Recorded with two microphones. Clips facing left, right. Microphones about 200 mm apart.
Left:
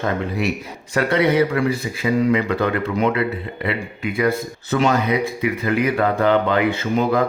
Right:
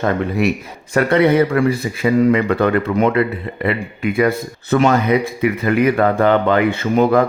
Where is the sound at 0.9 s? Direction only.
50° right (ahead or behind).